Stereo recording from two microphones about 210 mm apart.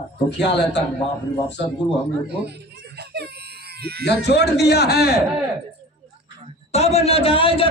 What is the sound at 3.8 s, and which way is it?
Speech, 50° right (ahead or behind).